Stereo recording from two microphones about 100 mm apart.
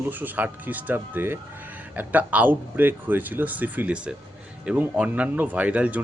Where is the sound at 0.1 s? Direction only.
20° right (ahead or behind).